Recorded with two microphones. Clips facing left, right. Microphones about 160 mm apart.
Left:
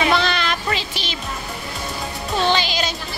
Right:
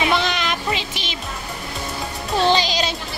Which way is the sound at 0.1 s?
15° right (ahead or behind).